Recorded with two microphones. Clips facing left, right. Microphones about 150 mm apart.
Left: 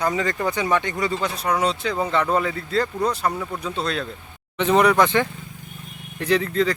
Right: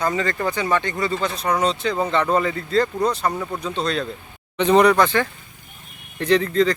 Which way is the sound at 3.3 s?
10° right (ahead or behind).